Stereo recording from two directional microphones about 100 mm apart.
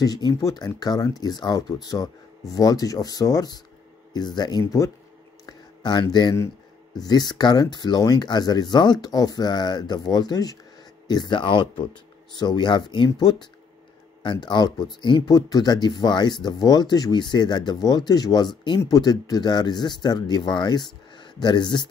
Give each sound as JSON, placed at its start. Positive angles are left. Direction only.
{"t": 0.0, "sound": "speech", "side_deg": 40}
{"t": 5.5, "sound": "a sound", "side_deg": 45}
{"t": 7.0, "sound": "speech", "side_deg": 45}
{"t": 15.3, "sound": "speech", "side_deg": 40}